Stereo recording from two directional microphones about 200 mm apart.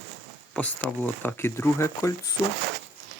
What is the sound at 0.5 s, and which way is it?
Speech, 5° left (ahead or behind).